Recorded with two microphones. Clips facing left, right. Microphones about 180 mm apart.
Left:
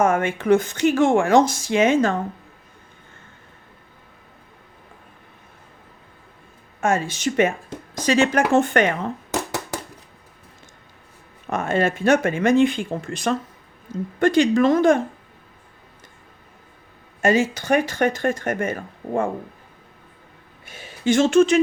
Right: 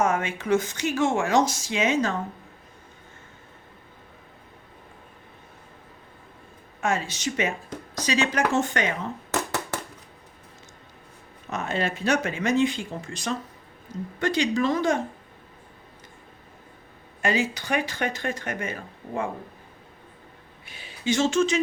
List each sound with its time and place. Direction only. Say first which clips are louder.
0.0 s speech: left 5 dB; 55° left (ahead or behind)
6.8 s speech: left 5 dB; 50° left (ahead or behind)
9.3 s a sound: right 2 dB; 10° left (ahead or behind)
11.4 s speech: left 7 dB; 50° left (ahead or behind)
17.2 s speech: left 6 dB; 45° left (ahead or behind)
20.7 s speech: left 6 dB; 45° left (ahead or behind)